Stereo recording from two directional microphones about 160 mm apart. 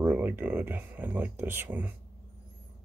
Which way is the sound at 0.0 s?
15° right (ahead or behind).